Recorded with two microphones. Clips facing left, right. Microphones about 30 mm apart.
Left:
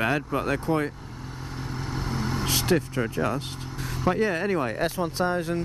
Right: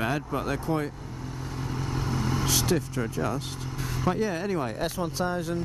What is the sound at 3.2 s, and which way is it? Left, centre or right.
Speech, centre.